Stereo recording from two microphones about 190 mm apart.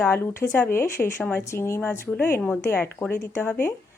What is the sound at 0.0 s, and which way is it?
Speech, 10° left (ahead or behind).